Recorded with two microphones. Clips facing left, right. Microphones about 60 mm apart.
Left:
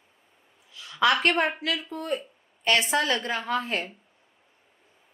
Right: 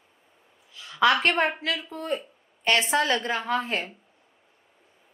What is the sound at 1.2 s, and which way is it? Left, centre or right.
A woman's voice, right.